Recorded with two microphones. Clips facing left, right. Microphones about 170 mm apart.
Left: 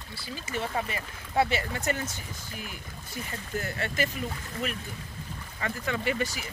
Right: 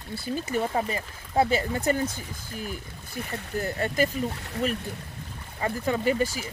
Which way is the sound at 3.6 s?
40° right (ahead or behind).